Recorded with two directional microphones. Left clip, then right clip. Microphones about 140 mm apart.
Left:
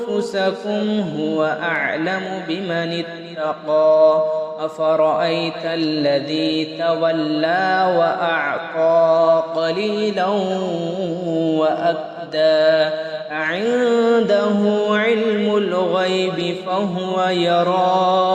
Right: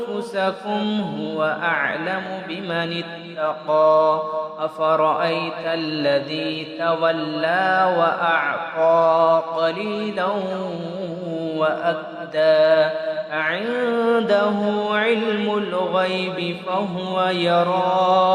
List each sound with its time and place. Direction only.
1.4 s mantra: 30° left (ahead or behind)
3.7 s mantra: 20° left (ahead or behind)
4.8 s a man's voice: 15° left (ahead or behind)
5.2 s mantra: 30° left (ahead or behind)
6.3 s mantra: 35° left (ahead or behind)
9.6 s mantra: 40° left (ahead or behind)
11.4 s a man's voice: 35° left (ahead or behind)
12.4 s mantra: 40° left (ahead or behind)
13.9 s mantra: 25° left (ahead or behind)
16.7 s mantra: 20° left (ahead or behind)